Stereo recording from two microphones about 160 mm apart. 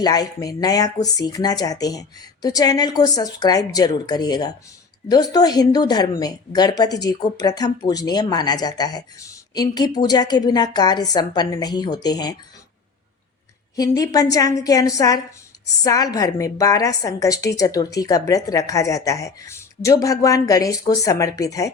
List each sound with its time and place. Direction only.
0.0 s speech: 25° left (ahead or behind)
13.7 s speech: 20° left (ahead or behind)